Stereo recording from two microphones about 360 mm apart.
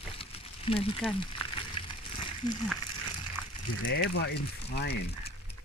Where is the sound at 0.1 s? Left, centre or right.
Centre.